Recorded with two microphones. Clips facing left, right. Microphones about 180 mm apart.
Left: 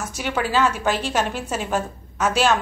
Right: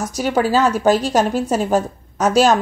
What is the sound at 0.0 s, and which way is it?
A woman's voice, 40° right (ahead or behind).